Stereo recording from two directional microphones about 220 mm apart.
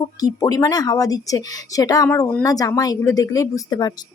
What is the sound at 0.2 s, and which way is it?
Speech, 15° left (ahead or behind).